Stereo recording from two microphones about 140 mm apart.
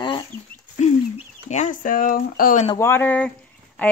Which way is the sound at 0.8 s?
55° left (ahead or behind).